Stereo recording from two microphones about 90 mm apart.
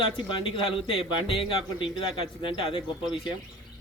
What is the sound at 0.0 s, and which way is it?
Speech, 70° left (ahead or behind).